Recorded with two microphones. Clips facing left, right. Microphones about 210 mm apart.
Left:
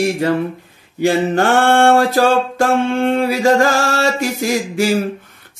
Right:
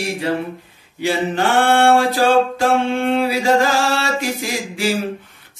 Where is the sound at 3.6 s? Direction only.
45° left (ahead or behind).